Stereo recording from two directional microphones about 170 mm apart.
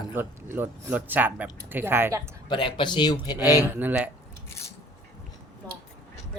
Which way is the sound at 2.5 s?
30° left (ahead or behind).